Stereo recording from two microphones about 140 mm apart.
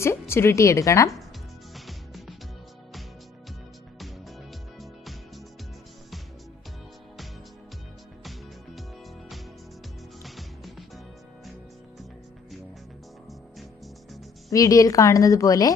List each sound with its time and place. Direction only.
0.0 s a woman's voice: 20° left (ahead or behind)
1.7 s music: centre (ahead or behind)
8.2 s music: centre (ahead or behind)
10.2 s music: centre (ahead or behind)
14.5 s a woman's voice: 25° left (ahead or behind)